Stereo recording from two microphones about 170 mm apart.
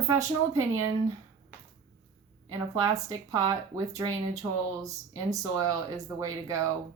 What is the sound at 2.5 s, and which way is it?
Speech, 20° right (ahead or behind).